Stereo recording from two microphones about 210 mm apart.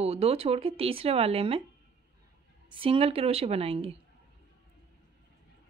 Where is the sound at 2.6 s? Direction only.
25° right (ahead or behind).